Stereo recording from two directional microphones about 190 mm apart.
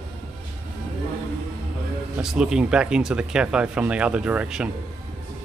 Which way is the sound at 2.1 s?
5° right (ahead or behind).